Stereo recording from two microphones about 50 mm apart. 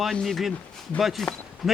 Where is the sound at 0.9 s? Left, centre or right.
Centre.